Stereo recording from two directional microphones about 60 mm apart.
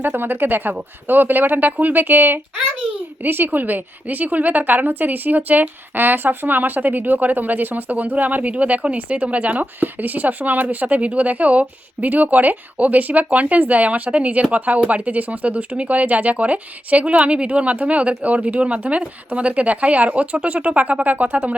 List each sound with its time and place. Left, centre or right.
0.0 s a woman's voice: right